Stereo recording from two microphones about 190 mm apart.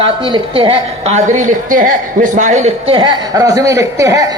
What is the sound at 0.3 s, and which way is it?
A woman's voice, 30° right (ahead or behind).